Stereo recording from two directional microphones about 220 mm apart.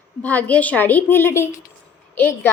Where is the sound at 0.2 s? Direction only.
5° left (ahead or behind).